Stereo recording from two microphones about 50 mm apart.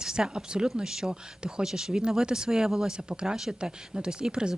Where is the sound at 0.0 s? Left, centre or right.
Centre.